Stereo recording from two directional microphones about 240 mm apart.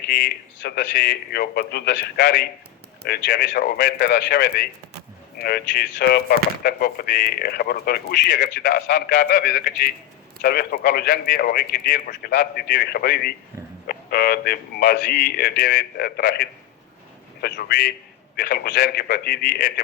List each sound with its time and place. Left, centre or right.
0.1 s a man's voice: left